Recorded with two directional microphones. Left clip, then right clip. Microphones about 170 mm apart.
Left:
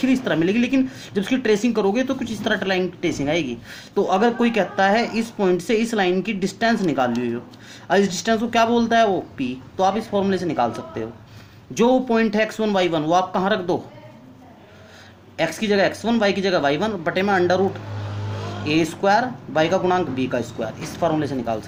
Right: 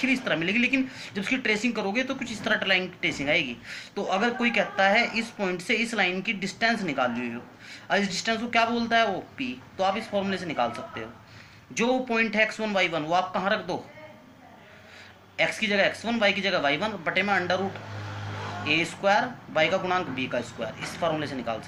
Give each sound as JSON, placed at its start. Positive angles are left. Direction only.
{"t": 0.0, "sound": "speech", "side_deg": 45}
{"t": 15.4, "sound": "speech", "side_deg": 50}
{"t": 18.6, "sound": "speech", "side_deg": 50}